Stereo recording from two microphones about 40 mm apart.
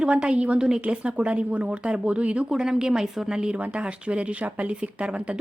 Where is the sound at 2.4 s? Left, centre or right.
Centre.